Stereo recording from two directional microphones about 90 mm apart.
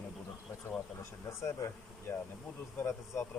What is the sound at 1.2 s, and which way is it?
Speech, 30° left (ahead or behind).